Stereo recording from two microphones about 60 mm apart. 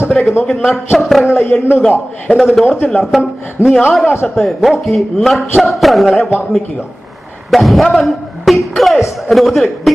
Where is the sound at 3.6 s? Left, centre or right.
Left.